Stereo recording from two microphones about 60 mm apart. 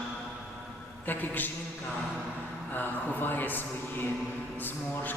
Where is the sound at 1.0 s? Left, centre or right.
Left.